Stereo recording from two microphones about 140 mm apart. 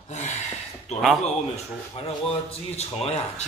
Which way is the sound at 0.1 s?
55° left (ahead or behind).